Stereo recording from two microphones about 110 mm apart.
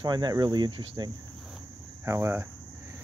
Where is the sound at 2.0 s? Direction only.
25° right (ahead or behind).